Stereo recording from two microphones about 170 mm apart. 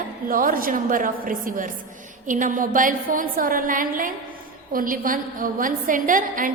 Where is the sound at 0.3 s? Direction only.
55° right (ahead or behind).